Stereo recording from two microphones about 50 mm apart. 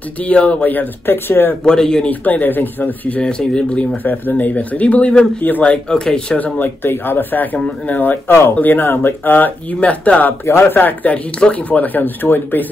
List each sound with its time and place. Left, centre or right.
0.2 s speech: left
1.6 s speech: centre
2.0 s speech: left
3.1 s speech: centre
3.9 s speech: left
5.9 s speech: centre
6.3 s speech: left
6.8 s speech: left
8.3 s speech: left
8.5 s speech: left
9.8 s speech: left
10.4 s speech: left
11.3 s speech: left